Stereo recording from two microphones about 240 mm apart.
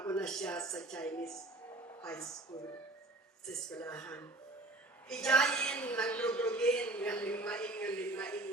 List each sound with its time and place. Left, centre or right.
0.0 s a woman's voice: centre
3.4 s a woman's voice: centre